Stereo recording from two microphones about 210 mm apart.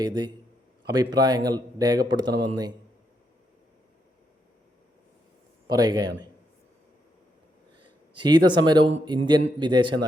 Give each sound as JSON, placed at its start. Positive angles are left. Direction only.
{"t": 0.0, "sound": "speech", "side_deg": -20}
{"t": 5.6, "sound": "speech", "side_deg": -20}
{"t": 7.8, "sound": "speech", "side_deg": -20}